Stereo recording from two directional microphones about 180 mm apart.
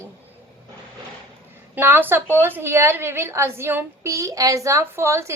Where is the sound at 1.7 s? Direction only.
10° right (ahead or behind).